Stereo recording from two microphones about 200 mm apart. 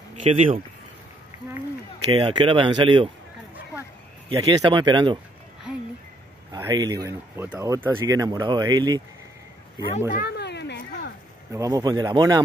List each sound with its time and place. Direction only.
0.1 s speech: 35° right (ahead or behind)
2.1 s speech: 25° right (ahead or behind)
4.3 s speech: 20° right (ahead or behind)
5.7 s speech: 5° right (ahead or behind)
6.5 s speech: 20° right (ahead or behind)
10.2 s a sound: 55° left (ahead or behind)
11.5 s speech: 20° right (ahead or behind)